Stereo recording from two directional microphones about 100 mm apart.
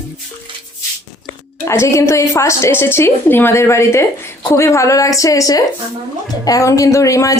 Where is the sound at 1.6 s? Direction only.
30° left (ahead or behind).